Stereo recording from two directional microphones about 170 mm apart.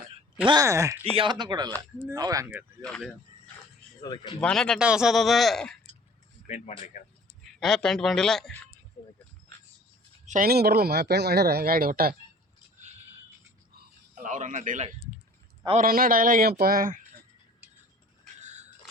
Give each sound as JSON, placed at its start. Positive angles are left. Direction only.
{"t": 0.4, "sound": "speech", "side_deg": -20}
{"t": 1.1, "sound": "speech", "side_deg": -30}
{"t": 2.8, "sound": "speech", "side_deg": 5}
{"t": 4.0, "sound": "speech", "side_deg": 25}
{"t": 4.4, "sound": "speech", "side_deg": 5}
{"t": 6.5, "sound": "speech", "side_deg": 40}
{"t": 7.6, "sound": "speech", "side_deg": 0}
{"t": 9.0, "sound": "speech", "side_deg": 35}
{"t": 10.2, "sound": "speech", "side_deg": -55}
{"t": 14.3, "sound": "a man's voice", "side_deg": -45}
{"t": 18.4, "sound": "a sound", "side_deg": -40}